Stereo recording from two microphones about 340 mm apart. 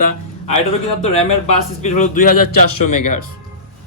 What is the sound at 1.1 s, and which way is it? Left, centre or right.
Speech, centre.